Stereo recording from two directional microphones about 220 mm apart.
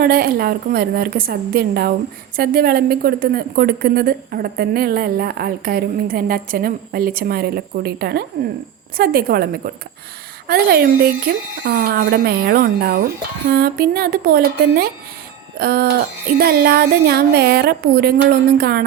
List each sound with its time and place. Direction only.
0.0 s a woman's voice: 45° right (ahead or behind)